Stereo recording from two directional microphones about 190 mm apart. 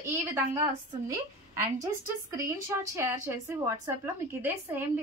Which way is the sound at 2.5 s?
15° right (ahead or behind).